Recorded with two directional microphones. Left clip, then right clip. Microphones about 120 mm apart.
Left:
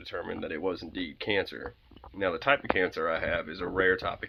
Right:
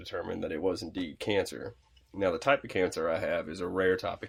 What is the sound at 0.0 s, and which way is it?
Speech, 35° right (ahead or behind).